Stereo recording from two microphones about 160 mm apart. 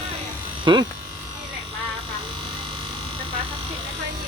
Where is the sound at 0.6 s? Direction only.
30° right (ahead or behind).